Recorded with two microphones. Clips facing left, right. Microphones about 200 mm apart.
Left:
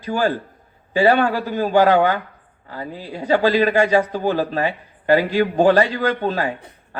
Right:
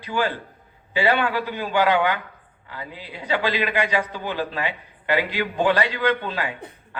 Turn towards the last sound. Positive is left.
turn(degrees=40)  # may be behind; listen again after turning